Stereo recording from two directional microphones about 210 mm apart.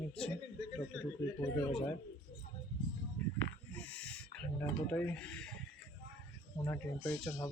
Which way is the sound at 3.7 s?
5° left (ahead or behind).